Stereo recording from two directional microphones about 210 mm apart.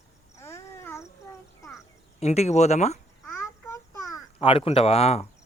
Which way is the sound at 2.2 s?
30° left (ahead or behind).